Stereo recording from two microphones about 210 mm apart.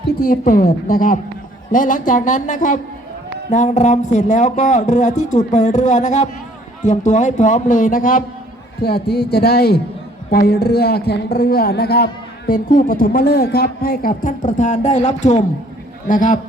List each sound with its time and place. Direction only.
0.2 s speech: 40° left (ahead or behind)